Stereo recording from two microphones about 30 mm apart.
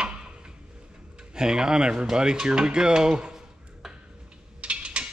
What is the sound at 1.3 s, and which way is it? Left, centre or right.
Speech, right.